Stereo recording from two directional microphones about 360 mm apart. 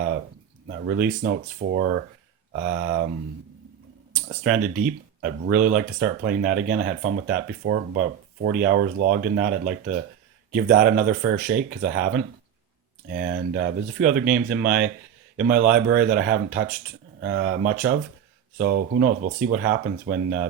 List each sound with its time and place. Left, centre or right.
0.9 s speech: right
4.1 s speech: right